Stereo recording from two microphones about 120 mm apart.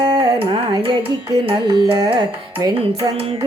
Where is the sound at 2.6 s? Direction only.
30° right (ahead or behind).